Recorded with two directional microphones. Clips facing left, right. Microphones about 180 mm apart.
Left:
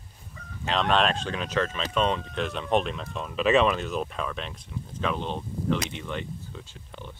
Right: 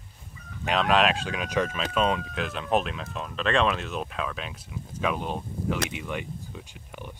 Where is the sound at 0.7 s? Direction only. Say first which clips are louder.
Right 1 dB; 5° right (ahead or behind).